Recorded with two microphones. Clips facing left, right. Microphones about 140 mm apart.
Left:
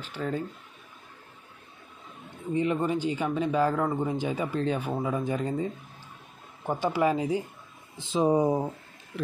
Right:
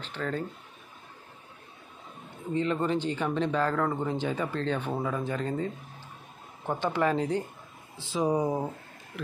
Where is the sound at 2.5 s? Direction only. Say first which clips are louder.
Left 1 dB; 15° left (ahead or behind).